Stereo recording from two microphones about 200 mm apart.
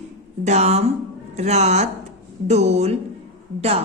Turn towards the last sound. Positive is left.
turn(degrees=-30)  # may be behind; listen again after turning